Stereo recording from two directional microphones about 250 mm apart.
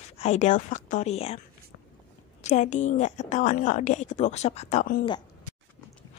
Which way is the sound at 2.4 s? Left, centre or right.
Left.